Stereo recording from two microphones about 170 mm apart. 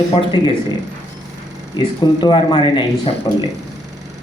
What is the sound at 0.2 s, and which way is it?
Speech, 30° left (ahead or behind).